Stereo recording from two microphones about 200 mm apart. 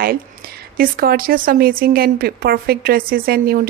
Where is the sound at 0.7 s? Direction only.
50° right (ahead or behind).